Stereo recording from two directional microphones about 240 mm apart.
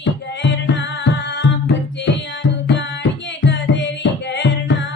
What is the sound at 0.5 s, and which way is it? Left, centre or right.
Music, left.